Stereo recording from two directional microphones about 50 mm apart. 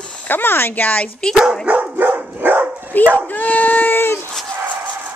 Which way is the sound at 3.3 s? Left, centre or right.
Left.